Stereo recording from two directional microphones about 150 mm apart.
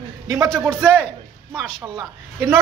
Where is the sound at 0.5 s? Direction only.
5° left (ahead or behind).